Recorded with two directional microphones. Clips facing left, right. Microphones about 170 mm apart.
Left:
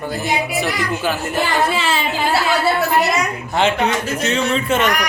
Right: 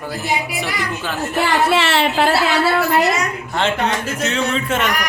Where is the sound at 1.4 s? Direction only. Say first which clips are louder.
Right 3 dB; 75° right (ahead or behind).